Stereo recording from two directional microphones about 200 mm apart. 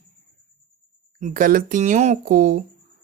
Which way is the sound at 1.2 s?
40° right (ahead or behind).